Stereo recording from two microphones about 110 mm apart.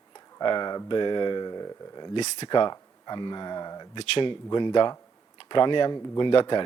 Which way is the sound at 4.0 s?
50° left (ahead or behind).